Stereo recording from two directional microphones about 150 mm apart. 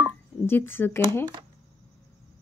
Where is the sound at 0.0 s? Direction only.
15° left (ahead or behind).